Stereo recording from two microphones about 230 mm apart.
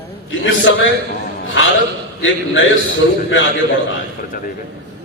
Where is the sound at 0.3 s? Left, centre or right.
Left.